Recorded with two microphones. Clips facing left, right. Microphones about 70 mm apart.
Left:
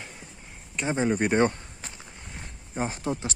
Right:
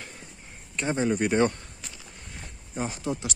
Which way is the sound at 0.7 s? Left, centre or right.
Left.